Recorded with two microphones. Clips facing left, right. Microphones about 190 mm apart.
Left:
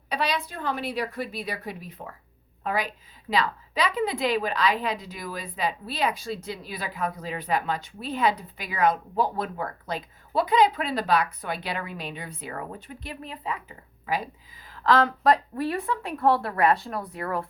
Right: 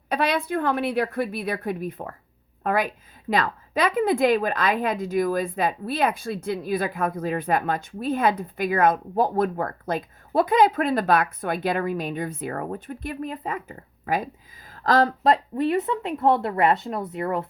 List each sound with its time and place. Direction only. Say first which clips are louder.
0.1 s a woman's voice: right 5 dB; 55° right (ahead or behind)
14.7 s a sound: right 2 dB; 40° right (ahead or behind)
15.2 s speech: right 2 dB; 25° right (ahead or behind)